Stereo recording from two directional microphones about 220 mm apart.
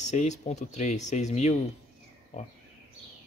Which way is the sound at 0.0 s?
30° left (ahead or behind).